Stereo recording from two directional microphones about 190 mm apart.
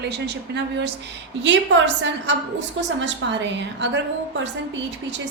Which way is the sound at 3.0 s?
70° right (ahead or behind).